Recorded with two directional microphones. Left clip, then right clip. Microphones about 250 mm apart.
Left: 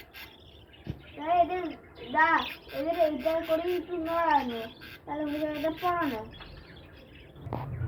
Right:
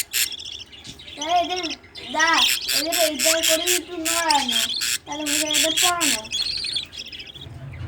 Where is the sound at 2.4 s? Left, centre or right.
Right.